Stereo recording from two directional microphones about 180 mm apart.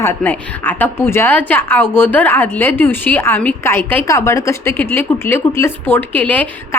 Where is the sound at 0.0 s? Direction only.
10° left (ahead or behind).